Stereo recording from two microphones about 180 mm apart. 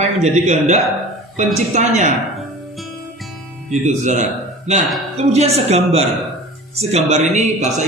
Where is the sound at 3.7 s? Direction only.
40° right (ahead or behind).